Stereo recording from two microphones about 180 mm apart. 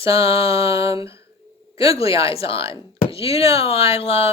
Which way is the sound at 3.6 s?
35° left (ahead or behind).